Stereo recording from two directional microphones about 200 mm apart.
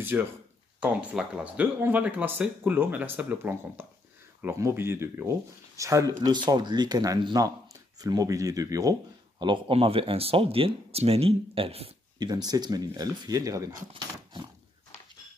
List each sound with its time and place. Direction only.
0.0 s speech: 10° right (ahead or behind)